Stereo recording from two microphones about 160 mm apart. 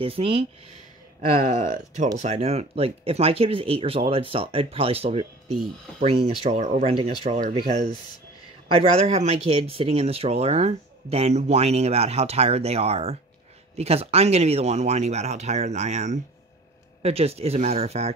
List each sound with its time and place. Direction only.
0.0 s speech: 35° right (ahead or behind)
1.4 s speech: 50° right (ahead or behind)
6.2 s speech: 40° right (ahead or behind)
8.6 s speech: 35° right (ahead or behind)